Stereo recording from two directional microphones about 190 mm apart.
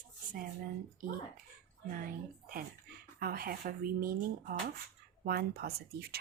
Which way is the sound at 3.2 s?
50° right (ahead or behind).